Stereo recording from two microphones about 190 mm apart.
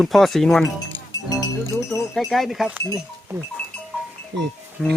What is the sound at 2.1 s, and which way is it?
Speech, centre (ahead or behind).